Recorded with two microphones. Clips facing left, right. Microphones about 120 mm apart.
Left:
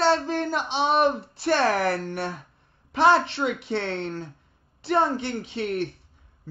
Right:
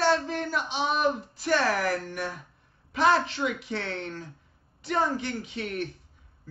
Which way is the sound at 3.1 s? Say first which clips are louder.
Left 3 dB; 30° left (ahead or behind).